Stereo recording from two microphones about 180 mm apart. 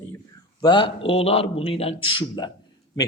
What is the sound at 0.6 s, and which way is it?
A man's voice, 25° left (ahead or behind).